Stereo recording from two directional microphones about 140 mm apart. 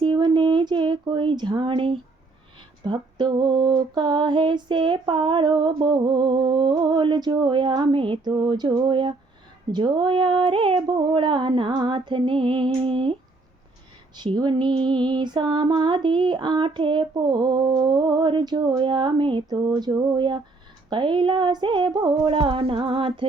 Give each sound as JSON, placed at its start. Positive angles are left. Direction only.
{"t": 0.0, "sound": "a sound", "side_deg": -35}
{"t": 2.8, "sound": "female singing", "side_deg": -30}
{"t": 14.2, "sound": "female singing", "side_deg": -30}